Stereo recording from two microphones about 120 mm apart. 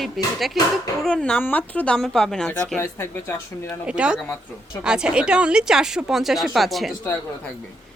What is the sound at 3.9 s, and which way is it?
A woman's voice, 10° right (ahead or behind).